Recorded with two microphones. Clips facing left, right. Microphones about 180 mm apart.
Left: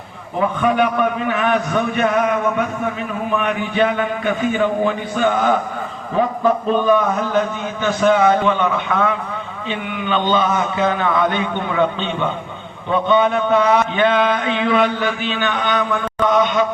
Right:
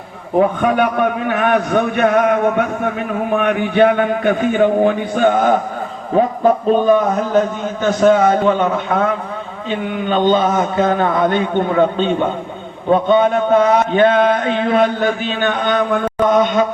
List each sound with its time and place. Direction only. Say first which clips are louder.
0.3 s a man's voice: right 3 dB; 50° right (ahead or behind)